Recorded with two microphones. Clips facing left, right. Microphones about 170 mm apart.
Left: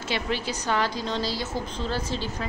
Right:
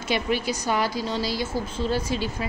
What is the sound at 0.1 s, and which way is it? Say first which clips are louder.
A woman's voice: right 4 dB; 10° right (ahead or behind).